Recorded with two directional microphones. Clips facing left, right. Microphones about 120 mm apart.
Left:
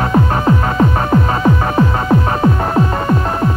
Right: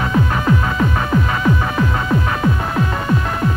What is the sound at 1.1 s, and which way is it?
Music, 35° left (ahead or behind).